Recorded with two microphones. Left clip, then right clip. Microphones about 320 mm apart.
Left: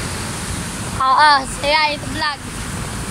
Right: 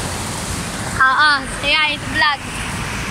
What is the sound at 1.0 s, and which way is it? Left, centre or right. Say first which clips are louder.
Speech: left 2 dB; centre.